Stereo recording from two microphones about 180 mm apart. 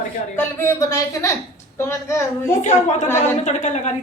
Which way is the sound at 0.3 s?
15° left (ahead or behind).